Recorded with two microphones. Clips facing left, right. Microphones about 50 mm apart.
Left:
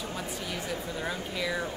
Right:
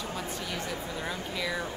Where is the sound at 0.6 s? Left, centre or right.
Centre.